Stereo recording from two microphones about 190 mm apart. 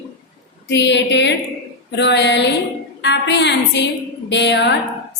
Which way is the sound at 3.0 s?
65° left (ahead or behind).